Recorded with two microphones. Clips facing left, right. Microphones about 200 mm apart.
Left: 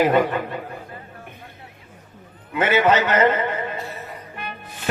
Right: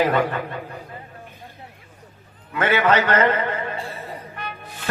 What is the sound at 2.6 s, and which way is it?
Speech, 20° left (ahead or behind).